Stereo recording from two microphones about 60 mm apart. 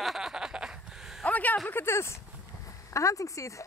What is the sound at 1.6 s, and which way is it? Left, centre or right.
Speech, left.